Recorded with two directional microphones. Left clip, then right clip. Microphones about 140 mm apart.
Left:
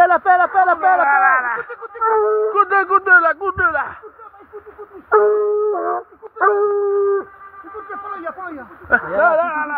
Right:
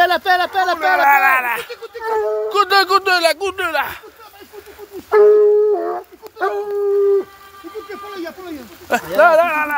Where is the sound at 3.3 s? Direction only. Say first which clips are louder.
Left 1 dB; 10° left (ahead or behind).